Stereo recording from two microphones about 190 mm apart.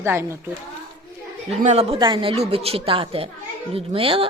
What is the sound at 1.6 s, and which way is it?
A woman's voice, 35° right (ahead or behind).